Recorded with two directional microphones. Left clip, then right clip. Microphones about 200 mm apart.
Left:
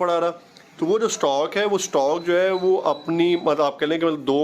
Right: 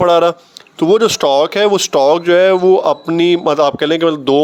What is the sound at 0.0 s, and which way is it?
Speech, 40° right (ahead or behind).